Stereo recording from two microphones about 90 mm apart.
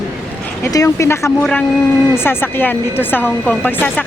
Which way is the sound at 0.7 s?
40° left (ahead or behind).